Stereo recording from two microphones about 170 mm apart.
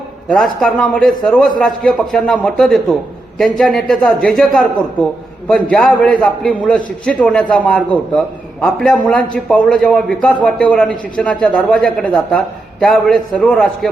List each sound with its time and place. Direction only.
0.3 s a man's voice: centre (ahead or behind)
5.7 s a man's voice: 5° left (ahead or behind)